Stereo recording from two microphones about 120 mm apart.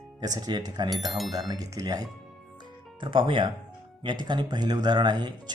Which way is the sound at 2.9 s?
45° right (ahead or behind).